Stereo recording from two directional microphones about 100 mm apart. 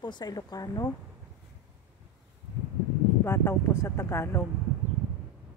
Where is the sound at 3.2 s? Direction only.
25° left (ahead or behind).